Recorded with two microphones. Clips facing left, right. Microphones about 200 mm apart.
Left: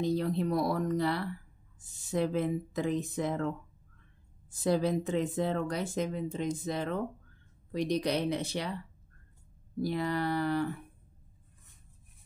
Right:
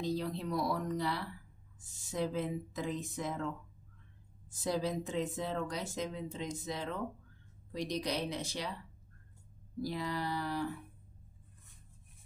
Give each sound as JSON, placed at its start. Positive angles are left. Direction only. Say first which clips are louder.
{"t": 0.0, "sound": "speech", "louder": "left 6 dB", "side_deg": 55}
{"t": 9.8, "sound": "speech", "louder": "left 6 dB", "side_deg": 60}